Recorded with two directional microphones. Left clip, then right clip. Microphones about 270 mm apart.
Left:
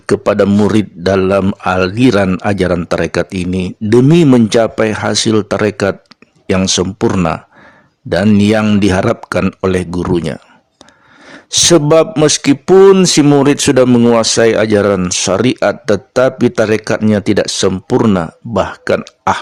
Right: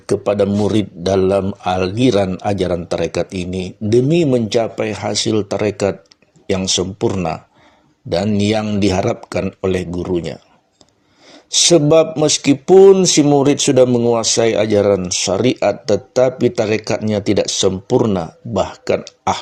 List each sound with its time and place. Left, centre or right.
0.0 s speech: left